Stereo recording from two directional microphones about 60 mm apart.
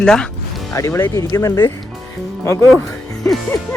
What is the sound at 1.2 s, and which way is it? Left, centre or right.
Speech, left.